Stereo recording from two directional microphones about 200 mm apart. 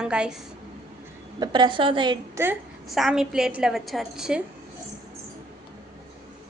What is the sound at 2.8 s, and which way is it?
A woman's voice, centre (ahead or behind).